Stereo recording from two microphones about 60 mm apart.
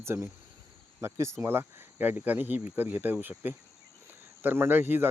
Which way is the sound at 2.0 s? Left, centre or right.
Right.